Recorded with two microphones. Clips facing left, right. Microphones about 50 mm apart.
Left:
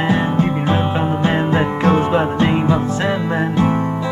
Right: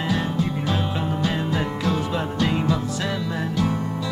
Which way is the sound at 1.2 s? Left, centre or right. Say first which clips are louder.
Left 8 dB; left.